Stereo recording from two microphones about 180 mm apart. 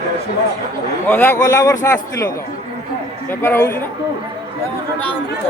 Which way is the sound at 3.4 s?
10° left (ahead or behind).